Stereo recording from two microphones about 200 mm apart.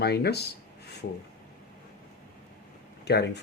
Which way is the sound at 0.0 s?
55° left (ahead or behind).